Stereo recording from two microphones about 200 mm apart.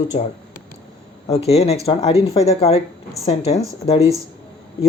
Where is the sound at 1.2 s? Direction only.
30° left (ahead or behind).